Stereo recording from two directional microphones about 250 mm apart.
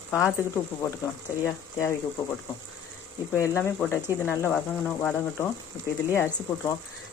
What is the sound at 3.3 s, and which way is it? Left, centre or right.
Speech, centre.